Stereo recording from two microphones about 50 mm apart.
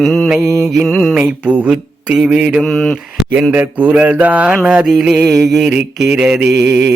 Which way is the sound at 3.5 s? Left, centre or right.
Right.